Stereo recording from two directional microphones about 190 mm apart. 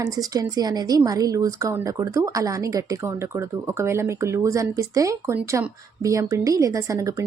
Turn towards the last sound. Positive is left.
turn(degrees=-15)  # may be behind; listen again after turning